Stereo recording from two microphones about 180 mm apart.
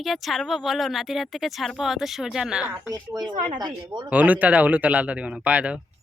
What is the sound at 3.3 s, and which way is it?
Speech, 45° right (ahead or behind).